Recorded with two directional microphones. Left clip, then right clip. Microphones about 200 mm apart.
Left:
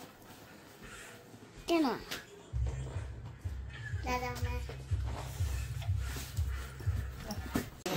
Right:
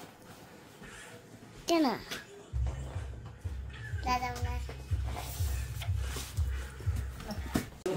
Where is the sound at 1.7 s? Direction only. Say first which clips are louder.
Right 2 dB; 30° right (ahead or behind).